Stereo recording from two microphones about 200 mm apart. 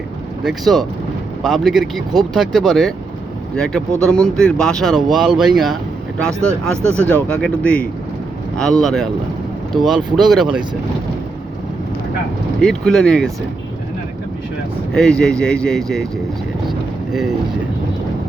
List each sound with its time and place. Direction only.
0.4 s speech: centre (ahead or behind)
12.6 s speech: centre (ahead or behind)
14.9 s speech: 5° left (ahead or behind)
16.6 s vehicle: centre (ahead or behind)